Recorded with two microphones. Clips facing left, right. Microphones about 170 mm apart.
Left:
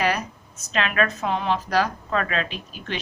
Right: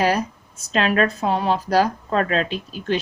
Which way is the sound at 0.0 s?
30° right (ahead or behind).